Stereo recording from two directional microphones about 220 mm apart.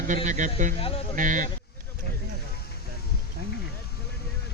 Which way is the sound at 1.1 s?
35° right (ahead or behind).